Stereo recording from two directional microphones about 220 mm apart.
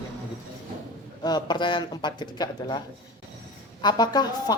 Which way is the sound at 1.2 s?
20° left (ahead or behind).